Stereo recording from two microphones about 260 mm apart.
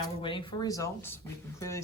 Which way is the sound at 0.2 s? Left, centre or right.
Centre.